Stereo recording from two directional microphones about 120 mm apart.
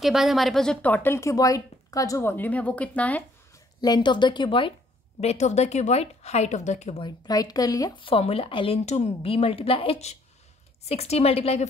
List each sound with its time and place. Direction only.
0.0 s speech: centre (ahead or behind)
3.8 s speech: 35° left (ahead or behind)
5.2 s a woman's voice: 65° left (ahead or behind)
7.0 s speech: 35° left (ahead or behind)
8.0 s speech: 50° left (ahead or behind)
8.8 s a woman's voice: 65° left (ahead or behind)